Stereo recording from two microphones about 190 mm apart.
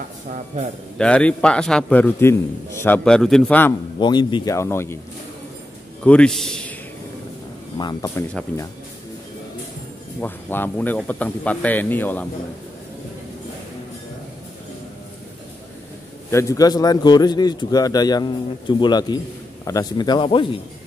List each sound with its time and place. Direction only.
0.9 s a man's voice: 5° left (ahead or behind)
4.0 s a man's voice: 25° left (ahead or behind)
6.0 s a man's voice: 5° left (ahead or behind)
7.7 s a man's voice: 20° left (ahead or behind)
10.2 s a man's voice: 10° left (ahead or behind)
16.3 s a man's voice: 15° left (ahead or behind)